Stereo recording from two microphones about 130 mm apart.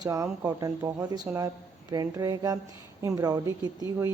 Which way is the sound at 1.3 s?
15° right (ahead or behind).